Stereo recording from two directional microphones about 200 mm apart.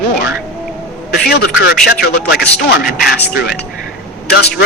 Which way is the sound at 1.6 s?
50° left (ahead or behind).